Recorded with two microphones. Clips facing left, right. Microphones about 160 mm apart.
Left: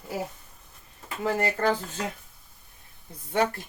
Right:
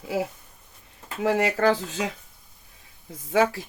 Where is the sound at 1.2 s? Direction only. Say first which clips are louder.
Right 4 dB; 85° right.